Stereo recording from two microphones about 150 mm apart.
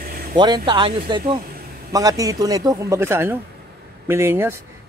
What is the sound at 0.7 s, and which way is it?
Speech, 30° right (ahead or behind).